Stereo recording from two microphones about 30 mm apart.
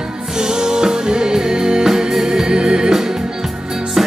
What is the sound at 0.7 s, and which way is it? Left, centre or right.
Music, right.